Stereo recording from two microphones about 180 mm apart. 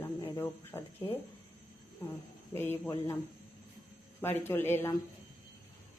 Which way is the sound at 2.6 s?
10° left (ahead or behind).